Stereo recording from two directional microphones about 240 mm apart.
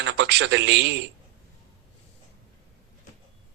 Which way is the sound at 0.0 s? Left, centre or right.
Right.